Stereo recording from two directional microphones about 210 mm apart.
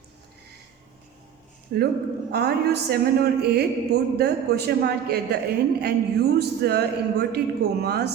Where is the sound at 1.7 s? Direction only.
50° right (ahead or behind).